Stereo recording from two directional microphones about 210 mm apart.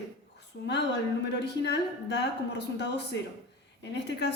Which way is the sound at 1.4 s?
55° left (ahead or behind).